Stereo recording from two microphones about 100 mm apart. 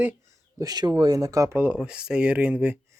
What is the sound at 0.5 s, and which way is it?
Speech, 40° right (ahead or behind).